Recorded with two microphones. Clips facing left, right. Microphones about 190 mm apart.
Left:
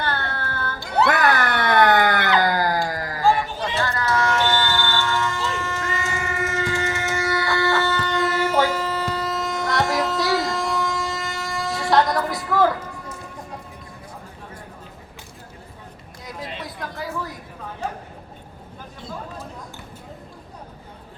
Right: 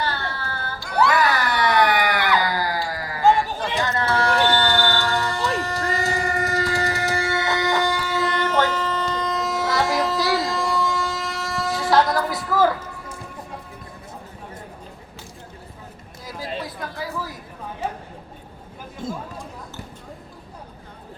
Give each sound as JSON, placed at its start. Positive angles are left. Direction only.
{"t": 0.0, "sound": "child singing", "side_deg": 55}
{"t": 1.1, "sound": "a sound", "side_deg": 55}
{"t": 3.8, "sound": "run", "side_deg": -20}
{"t": 4.4, "sound": "a sound", "side_deg": -35}
{"t": 5.5, "sound": "train", "side_deg": -35}
{"t": 16.2, "sound": "chatter", "side_deg": 0}
{"t": 19.0, "sound": "chatter", "side_deg": -45}